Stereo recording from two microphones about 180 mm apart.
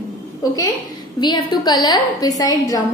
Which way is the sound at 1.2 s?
25° left (ahead or behind).